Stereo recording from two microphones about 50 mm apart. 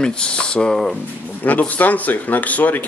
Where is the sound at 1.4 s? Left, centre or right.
Left.